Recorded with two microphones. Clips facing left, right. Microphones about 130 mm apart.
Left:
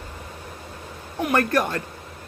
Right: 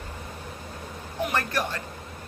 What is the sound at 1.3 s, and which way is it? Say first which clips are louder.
Speech: left 9 dB; 50° left (ahead or behind).